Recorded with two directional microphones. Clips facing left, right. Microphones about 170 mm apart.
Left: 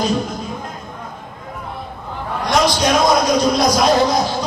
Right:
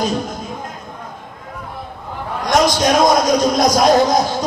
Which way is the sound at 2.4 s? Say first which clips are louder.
Right 2 dB; 45° right (ahead or behind).